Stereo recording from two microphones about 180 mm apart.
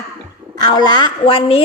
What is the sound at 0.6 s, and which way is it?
A woman's voice, 25° left (ahead or behind).